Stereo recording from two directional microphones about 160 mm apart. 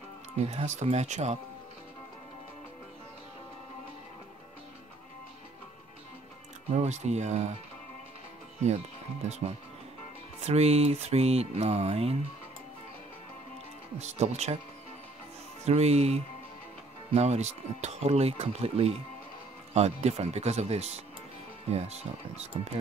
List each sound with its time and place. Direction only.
0.5 s speech: 45° right (ahead or behind)
6.7 s speech: 45° right (ahead or behind)
8.6 s speech: 45° right (ahead or behind)
13.9 s speech: 45° right (ahead or behind)
15.6 s speech: 40° right (ahead or behind)